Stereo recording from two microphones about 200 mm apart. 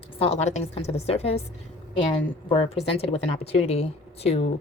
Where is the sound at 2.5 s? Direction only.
25° left (ahead or behind).